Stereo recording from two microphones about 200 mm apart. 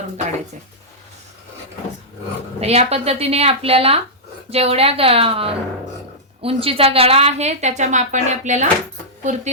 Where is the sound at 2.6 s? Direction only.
30° right (ahead or behind).